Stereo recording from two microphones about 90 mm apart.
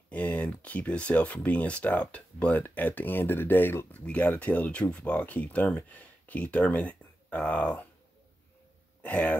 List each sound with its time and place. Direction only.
0.1 s speech: 15° left (ahead or behind)
9.0 s throat clearing: 15° left (ahead or behind)